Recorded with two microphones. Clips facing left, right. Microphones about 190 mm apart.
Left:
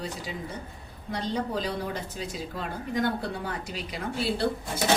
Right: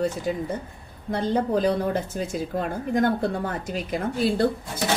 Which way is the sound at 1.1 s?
50° right (ahead or behind).